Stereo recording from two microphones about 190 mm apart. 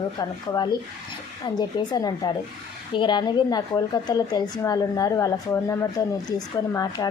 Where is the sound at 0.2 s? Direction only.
20° left (ahead or behind).